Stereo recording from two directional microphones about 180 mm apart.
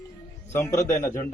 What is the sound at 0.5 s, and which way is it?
Speech, 15° left (ahead or behind).